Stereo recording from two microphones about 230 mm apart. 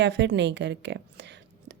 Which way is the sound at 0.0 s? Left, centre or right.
Right.